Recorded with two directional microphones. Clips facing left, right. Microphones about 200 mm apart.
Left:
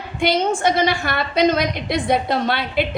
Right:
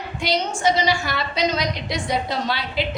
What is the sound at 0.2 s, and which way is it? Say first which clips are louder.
A woman's voice: left 5 dB; 55° left (ahead or behind).